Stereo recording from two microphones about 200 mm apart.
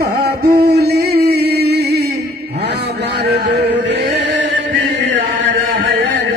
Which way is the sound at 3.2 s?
55° right (ahead or behind).